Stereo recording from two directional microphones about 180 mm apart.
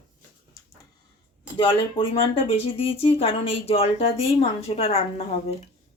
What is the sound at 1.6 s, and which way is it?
Speech, 30° left (ahead or behind).